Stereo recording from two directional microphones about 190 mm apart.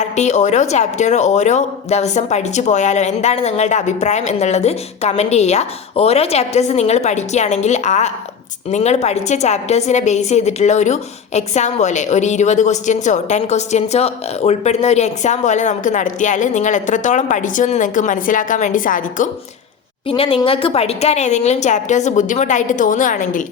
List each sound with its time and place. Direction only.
0.0 s a woman's voice: 40° left (ahead or behind)
20.1 s a woman's voice: 30° left (ahead or behind)